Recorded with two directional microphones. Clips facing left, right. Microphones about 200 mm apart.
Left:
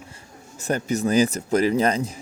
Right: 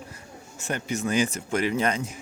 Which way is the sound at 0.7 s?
40° left (ahead or behind).